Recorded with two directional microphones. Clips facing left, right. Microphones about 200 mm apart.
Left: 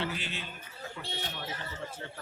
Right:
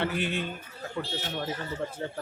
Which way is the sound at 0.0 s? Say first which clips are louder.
Right 7 dB; 55° right (ahead or behind).